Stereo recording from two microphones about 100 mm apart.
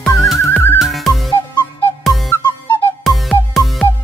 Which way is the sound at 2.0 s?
Centre (ahead or behind).